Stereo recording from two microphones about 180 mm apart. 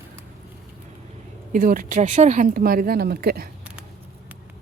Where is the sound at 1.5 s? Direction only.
50° right (ahead or behind).